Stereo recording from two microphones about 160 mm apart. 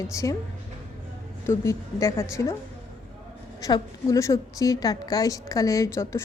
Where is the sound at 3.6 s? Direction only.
20° left (ahead or behind).